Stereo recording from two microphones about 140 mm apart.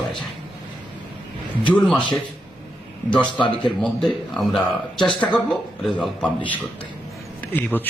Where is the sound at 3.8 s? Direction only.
5° left (ahead or behind).